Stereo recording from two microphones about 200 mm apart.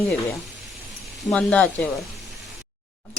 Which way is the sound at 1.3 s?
5° left (ahead or behind).